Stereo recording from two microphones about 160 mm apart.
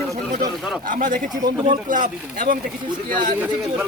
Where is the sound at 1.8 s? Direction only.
55° right (ahead or behind).